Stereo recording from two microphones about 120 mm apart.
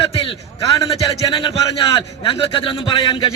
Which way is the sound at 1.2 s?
45° left (ahead or behind).